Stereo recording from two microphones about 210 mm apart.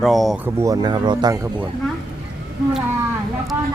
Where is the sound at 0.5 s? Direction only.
15° right (ahead or behind).